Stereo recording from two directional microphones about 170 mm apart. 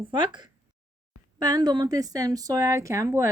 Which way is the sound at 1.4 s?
20° right (ahead or behind).